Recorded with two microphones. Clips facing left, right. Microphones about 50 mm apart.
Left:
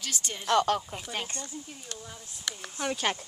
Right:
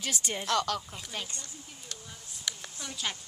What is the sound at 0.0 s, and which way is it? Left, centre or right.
Speech, centre.